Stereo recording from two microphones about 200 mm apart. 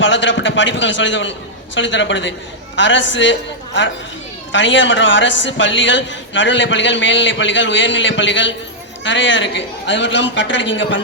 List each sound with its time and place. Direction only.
0.0 s a man's voice: 65° left (ahead or behind)